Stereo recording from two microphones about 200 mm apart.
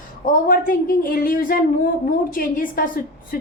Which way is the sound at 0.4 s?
45° left (ahead or behind).